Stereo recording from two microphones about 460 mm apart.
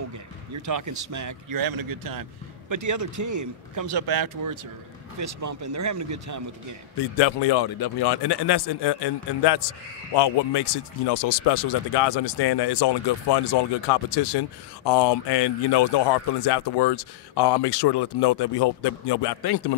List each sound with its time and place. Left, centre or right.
0.6 s speech: right
7.2 s a man's voice: left